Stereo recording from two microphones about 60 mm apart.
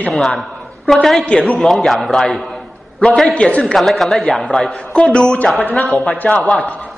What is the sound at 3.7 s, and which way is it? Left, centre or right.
A man's voice, centre.